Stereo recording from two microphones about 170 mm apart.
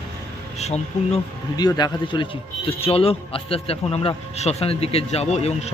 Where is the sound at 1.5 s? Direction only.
25° left (ahead or behind).